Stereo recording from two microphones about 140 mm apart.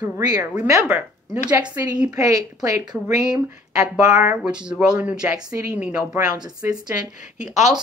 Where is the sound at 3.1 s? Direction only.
5° right (ahead or behind).